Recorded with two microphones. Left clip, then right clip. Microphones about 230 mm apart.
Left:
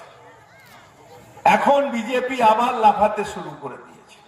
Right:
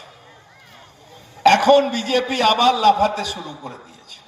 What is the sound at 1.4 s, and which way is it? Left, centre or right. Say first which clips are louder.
A woman's voice: right 3 dB; left.